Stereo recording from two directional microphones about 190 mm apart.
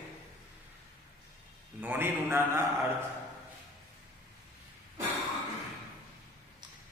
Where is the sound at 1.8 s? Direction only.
10° right (ahead or behind).